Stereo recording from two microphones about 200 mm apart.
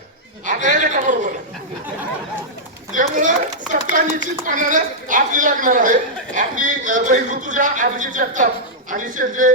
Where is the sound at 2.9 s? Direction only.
40° right (ahead or behind).